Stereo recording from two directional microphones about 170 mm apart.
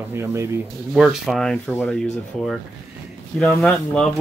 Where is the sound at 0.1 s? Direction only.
15° right (ahead or behind).